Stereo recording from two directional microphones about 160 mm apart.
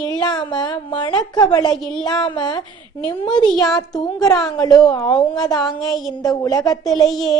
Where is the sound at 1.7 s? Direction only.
5° left (ahead or behind).